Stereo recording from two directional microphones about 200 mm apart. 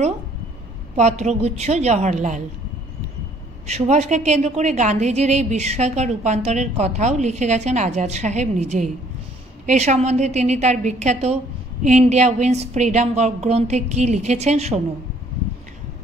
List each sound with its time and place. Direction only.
0.9 s a woman's voice: 35° right (ahead or behind)
3.6 s a woman's voice: 35° right (ahead or behind)